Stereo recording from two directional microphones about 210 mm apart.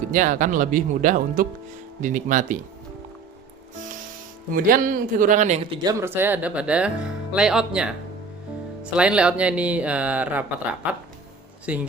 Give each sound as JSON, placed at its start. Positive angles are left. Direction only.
{"t": 0.1, "sound": "speech", "side_deg": -40}
{"t": 4.5, "sound": "speech", "side_deg": -40}
{"t": 5.8, "sound": "speech", "side_deg": -15}